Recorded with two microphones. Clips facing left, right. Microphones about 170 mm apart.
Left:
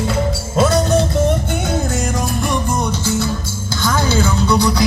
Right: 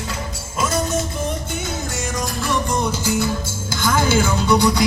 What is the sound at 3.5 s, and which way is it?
Music, 50° right (ahead or behind).